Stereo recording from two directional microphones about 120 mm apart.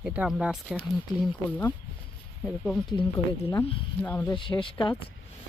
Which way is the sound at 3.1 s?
25° left (ahead or behind).